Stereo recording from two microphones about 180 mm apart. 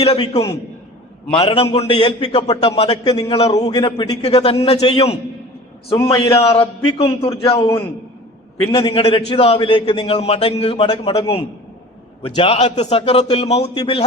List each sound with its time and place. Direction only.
0.1 s a man's voice: 20° left (ahead or behind)
1.4 s a man's voice: 35° left (ahead or behind)
6.3 s a man's voice: 35° left (ahead or behind)
8.7 s a man's voice: 30° left (ahead or behind)